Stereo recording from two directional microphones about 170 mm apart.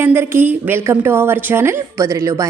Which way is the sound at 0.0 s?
15° right (ahead or behind).